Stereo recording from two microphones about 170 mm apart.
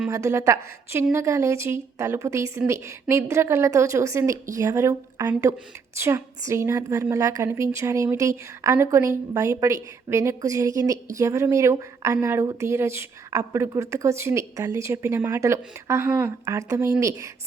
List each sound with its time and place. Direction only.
0.1 s a woman's voice: 15° right (ahead or behind)